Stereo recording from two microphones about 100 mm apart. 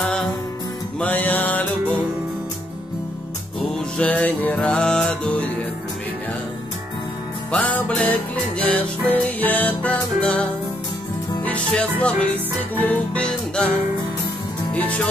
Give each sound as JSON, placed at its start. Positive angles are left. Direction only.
{"t": 0.0, "sound": "music", "side_deg": 0}
{"t": 0.9, "sound": "music", "side_deg": 15}
{"t": 4.0, "sound": "music", "side_deg": 15}
{"t": 7.5, "sound": "music", "side_deg": 10}
{"t": 11.4, "sound": "music", "side_deg": 10}
{"t": 14.7, "sound": "speech", "side_deg": 15}